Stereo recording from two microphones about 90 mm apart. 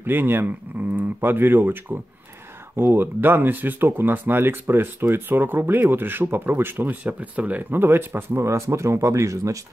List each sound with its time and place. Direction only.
0.0 s speech: 25° right (ahead or behind)